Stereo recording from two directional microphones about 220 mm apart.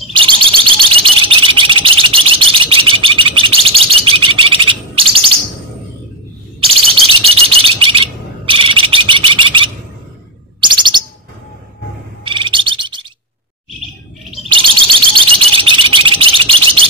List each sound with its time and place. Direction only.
0.1 s bird: 20° right (ahead or behind)
6.7 s alarm: 25° right (ahead or behind)
10.6 s bird: 20° right (ahead or behind)
12.3 s bird: 20° right (ahead or behind)
14.5 s bird: 20° right (ahead or behind)